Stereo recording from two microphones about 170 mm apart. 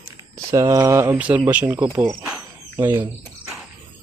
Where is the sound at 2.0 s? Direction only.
20° right (ahead or behind).